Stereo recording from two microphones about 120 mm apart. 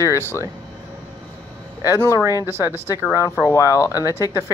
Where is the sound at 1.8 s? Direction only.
30° left (ahead or behind).